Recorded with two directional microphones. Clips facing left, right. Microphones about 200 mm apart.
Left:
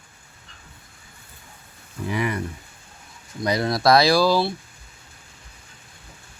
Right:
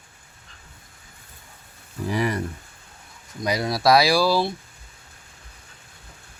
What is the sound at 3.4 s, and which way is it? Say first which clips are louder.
Speech: left 1 dB; 10° right (ahead or behind).